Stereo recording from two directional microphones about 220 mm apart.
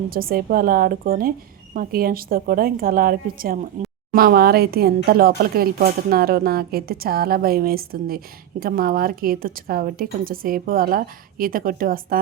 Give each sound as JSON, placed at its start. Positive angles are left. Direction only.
{"t": 0.1, "sound": "a woman's voice", "side_deg": -40}